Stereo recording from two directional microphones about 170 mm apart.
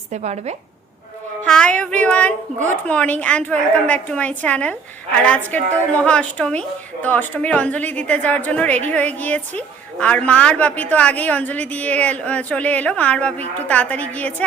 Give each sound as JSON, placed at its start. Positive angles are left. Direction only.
{"t": 0.1, "sound": "a woman's voice", "side_deg": -40}
{"t": 1.5, "sound": "a woman's voice", "side_deg": 5}